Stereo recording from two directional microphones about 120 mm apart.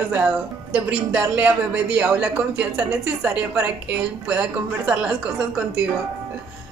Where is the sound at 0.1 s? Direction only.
10° right (ahead or behind).